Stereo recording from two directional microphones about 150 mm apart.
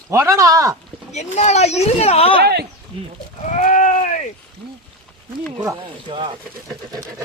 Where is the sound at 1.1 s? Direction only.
50° left (ahead or behind).